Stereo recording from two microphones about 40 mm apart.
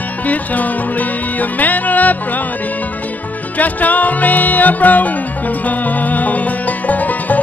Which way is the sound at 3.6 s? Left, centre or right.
Left.